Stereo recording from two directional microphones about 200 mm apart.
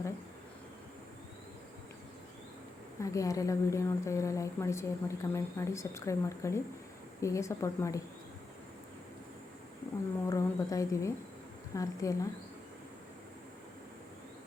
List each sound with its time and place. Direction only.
3.0 s a woman's voice: 15° left (ahead or behind)
10.2 s a woman's voice: 15° left (ahead or behind)